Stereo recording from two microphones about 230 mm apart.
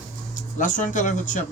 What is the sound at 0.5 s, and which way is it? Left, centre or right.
Speech, left.